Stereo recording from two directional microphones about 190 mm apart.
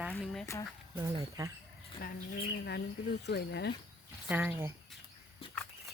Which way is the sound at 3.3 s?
60° left (ahead or behind).